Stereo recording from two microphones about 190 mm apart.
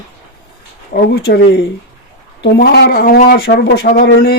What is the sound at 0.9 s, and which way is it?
Speech, 60° left (ahead or behind).